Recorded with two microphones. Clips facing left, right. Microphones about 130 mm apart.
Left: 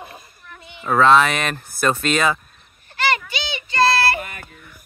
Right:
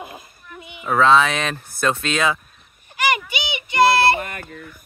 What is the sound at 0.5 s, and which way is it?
Speech, 10° right (ahead or behind).